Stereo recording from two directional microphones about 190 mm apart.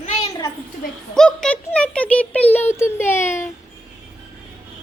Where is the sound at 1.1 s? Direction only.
5° left (ahead or behind).